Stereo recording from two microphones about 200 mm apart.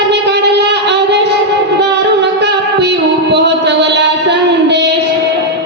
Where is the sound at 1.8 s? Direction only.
60° right (ahead or behind).